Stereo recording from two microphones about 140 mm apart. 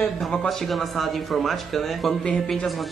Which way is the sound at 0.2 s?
5° left (ahead or behind).